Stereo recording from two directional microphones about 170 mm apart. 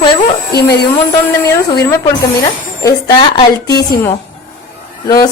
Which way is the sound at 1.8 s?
20° left (ahead or behind).